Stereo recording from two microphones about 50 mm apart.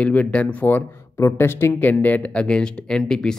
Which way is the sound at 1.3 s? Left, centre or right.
Left.